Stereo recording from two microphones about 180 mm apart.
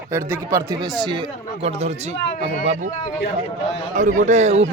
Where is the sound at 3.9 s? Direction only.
45° right (ahead or behind).